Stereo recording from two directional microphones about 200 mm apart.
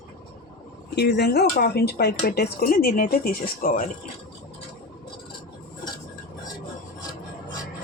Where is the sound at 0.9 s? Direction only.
55° left (ahead or behind).